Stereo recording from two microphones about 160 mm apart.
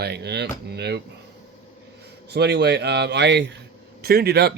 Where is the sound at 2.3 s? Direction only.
90° right.